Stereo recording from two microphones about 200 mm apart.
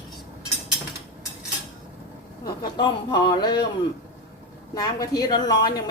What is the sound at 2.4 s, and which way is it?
Speech, 20° left (ahead or behind).